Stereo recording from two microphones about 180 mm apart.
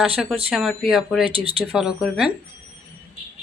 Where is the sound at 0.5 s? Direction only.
Centre (ahead or behind).